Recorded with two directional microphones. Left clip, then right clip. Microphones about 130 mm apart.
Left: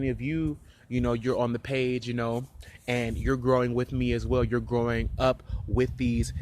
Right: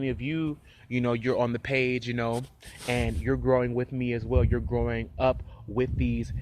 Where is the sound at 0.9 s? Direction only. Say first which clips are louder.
Right 1 dB; 15° left (ahead or behind).